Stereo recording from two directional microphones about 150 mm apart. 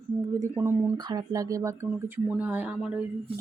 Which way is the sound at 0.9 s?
25° right (ahead or behind).